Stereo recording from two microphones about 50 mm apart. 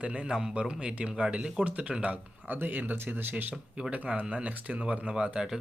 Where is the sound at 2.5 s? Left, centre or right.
Right.